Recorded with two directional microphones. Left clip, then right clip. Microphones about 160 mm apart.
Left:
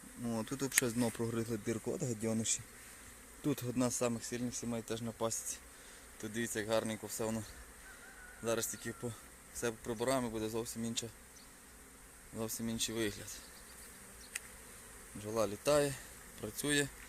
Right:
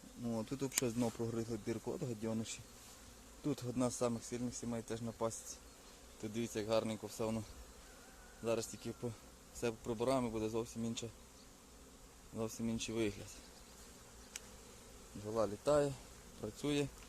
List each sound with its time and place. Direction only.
0.3 s speech: 10° left (ahead or behind)
0.9 s speech: 15° left (ahead or behind)
1.6 s speech: 45° left (ahead or behind)
3.4 s speech: 35° left (ahead or behind); by 5.5 s 15° left (ahead or behind)
6.2 s speech: centre (ahead or behind)
8.4 s speech: centre (ahead or behind)
12.4 s speech: centre (ahead or behind)
15.3 s speech: 10° left (ahead or behind)